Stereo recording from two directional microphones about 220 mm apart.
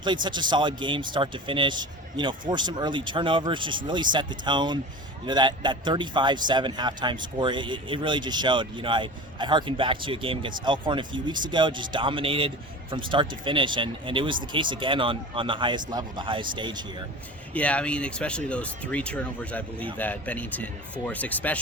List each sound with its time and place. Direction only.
0.0 s a man's voice: 20° right (ahead or behind)
17.5 s speech: 5° left (ahead or behind)